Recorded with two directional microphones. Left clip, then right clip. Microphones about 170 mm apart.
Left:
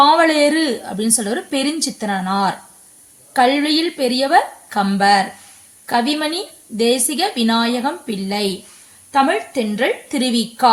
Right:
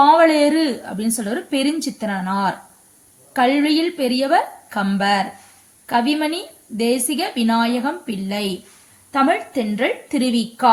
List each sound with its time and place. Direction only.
0.0 s a woman's voice: 35° left (ahead or behind)